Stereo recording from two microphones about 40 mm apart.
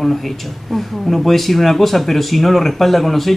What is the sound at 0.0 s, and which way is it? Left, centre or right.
Speech, centre.